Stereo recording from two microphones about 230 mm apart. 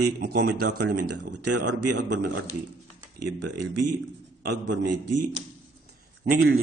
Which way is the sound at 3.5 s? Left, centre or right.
Right.